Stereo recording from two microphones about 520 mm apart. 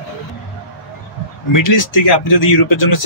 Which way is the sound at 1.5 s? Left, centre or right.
Left.